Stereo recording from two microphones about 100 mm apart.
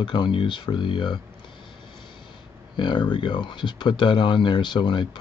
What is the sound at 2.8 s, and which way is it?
Speech, 50° left (ahead or behind).